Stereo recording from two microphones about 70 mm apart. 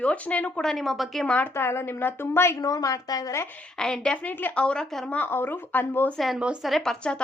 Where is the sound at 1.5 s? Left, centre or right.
Left.